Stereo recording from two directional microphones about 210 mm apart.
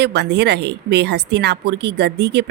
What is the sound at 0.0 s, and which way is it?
A woman's voice, 55° right (ahead or behind).